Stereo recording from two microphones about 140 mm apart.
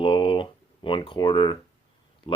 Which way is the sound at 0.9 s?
35° left (ahead or behind).